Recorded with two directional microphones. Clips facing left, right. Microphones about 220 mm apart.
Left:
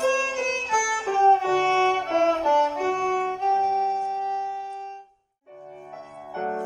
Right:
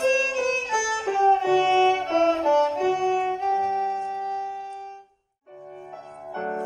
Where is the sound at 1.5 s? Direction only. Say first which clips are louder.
Right 3 dB; 25° right (ahead or behind).